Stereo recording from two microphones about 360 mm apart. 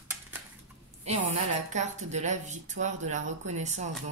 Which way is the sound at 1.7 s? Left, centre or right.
Centre.